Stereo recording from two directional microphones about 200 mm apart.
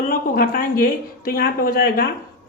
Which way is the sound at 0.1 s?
45° left (ahead or behind).